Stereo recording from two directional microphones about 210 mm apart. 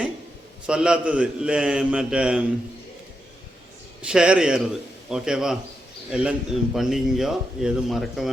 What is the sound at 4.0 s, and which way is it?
A man's voice, 5° right (ahead or behind).